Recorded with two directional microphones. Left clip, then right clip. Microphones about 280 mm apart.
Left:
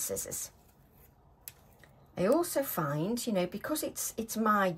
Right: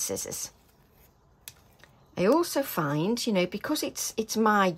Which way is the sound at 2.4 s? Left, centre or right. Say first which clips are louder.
Right 4 dB; centre.